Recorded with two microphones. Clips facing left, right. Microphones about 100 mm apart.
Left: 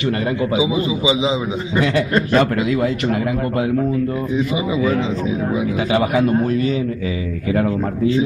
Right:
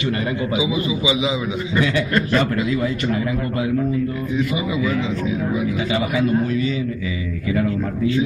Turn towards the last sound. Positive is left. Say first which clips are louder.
# left 2 dB
turn(degrees=50)  # may be behind; listen again after turning